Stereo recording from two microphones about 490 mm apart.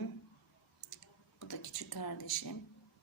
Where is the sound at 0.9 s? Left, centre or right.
Left.